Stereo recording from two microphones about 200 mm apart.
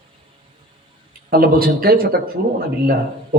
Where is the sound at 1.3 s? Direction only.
50° right (ahead or behind).